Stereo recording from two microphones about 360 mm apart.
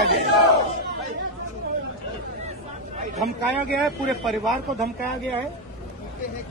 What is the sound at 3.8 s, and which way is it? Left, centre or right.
Speech, centre.